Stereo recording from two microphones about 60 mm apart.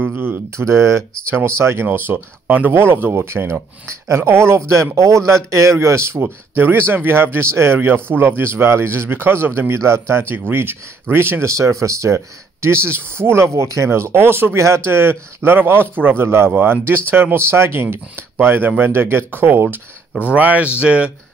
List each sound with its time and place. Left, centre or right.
0.0 s a sound: right
0.6 s speech: right
1.9 s speech: right
2.7 s speech: right
11.4 s speech: right
12.6 s speech: right
20.3 s speech: right